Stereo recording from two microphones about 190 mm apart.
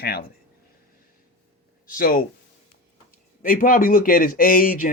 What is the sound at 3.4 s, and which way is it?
Speech, 50° left (ahead or behind).